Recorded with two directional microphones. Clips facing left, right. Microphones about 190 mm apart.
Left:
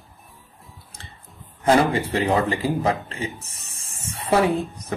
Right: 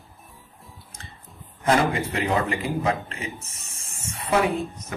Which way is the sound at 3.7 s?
35° left (ahead or behind).